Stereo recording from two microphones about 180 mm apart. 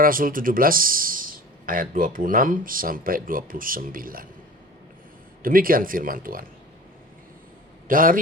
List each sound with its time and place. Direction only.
0.0 s speech: 50° right (ahead or behind)
5.4 s speech: 50° right (ahead or behind)
7.9 s speech: 50° right (ahead or behind)